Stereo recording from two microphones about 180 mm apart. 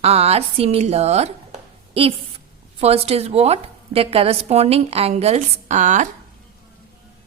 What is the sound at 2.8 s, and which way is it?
A woman's voice, 35° right (ahead or behind).